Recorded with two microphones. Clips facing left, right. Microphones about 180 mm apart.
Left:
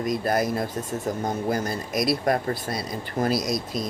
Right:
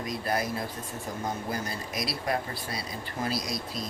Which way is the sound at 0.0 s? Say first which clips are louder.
Left 7 dB; 45° left (ahead or behind).